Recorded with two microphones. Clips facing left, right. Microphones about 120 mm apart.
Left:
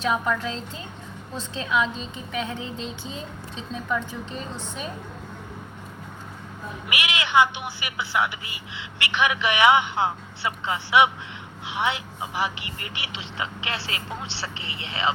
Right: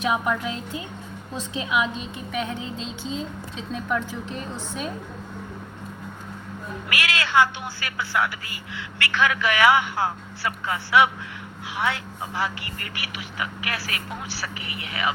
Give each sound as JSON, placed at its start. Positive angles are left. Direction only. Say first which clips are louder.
{"t": 0.0, "sound": "a woman's voice", "louder": "right 1 dB", "side_deg": -15}
{"t": 2.4, "sound": "music", "louder": "even", "side_deg": -20}
{"t": 3.8, "sound": "speech", "louder": "right 1 dB", "side_deg": -5}
{"t": 6.9, "sound": "speech", "louder": "even", "side_deg": 20}